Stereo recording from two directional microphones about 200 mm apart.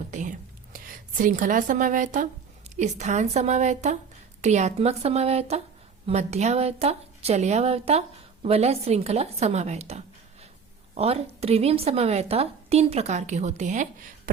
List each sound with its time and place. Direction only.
0.1 s a woman's voice: 40° right (ahead or behind)
2.6 s a sound: 35° right (ahead or behind)
3.0 s a woman's voice: 35° right (ahead or behind)